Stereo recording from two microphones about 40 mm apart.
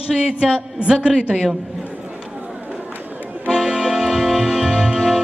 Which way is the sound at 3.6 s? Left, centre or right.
Centre.